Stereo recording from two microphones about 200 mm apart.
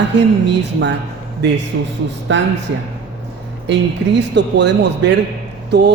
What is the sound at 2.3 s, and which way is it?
Speech, 65° right (ahead or behind).